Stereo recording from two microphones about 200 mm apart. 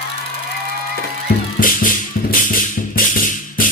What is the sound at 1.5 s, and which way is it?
Music, 40° left (ahead or behind).